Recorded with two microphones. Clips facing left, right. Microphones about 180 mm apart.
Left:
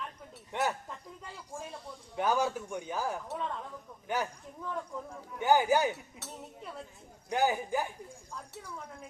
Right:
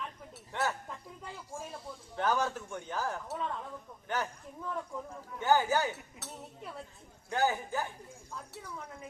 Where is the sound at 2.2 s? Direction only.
10° left (ahead or behind).